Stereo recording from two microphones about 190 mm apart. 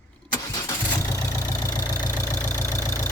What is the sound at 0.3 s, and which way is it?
Vehicle, 20° left (ahead or behind).